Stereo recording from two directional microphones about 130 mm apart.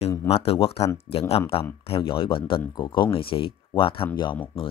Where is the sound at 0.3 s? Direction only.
50° left (ahead or behind).